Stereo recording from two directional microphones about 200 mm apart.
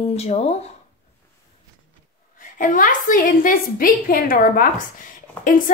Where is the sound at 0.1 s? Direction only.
30° left (ahead or behind).